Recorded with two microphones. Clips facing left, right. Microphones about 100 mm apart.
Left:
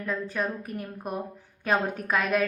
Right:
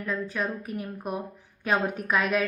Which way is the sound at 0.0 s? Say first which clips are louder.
Even; 40° left (ahead or behind).